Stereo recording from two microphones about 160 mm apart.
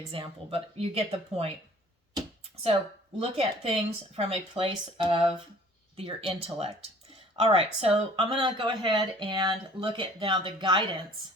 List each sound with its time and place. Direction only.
0.1 s speech: 35° right (ahead or behind)
3.2 s speech: 40° right (ahead or behind)